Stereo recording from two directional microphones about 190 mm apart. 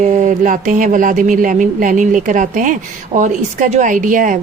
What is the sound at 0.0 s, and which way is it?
Speech, 40° right (ahead or behind).